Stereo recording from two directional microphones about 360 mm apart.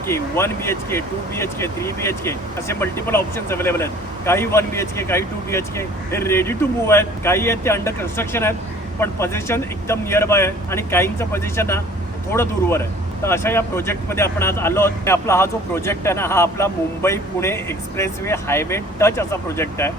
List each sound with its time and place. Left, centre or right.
0.1 s speech: centre